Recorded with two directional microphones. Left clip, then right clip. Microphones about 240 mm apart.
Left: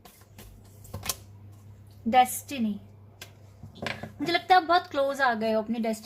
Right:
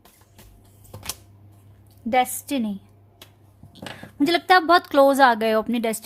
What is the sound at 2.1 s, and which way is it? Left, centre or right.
Speech, right.